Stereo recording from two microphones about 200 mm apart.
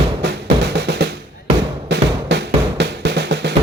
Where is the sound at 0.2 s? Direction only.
60° right (ahead or behind).